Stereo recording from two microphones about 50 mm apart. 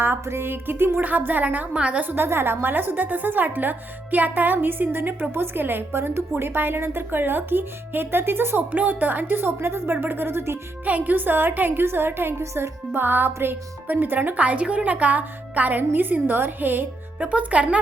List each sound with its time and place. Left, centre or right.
0.0 s a woman's voice: right
2.0 s a woman's voice: right
8.7 s a woman's voice: right
10.8 s a woman's voice: right
17.2 s speech: right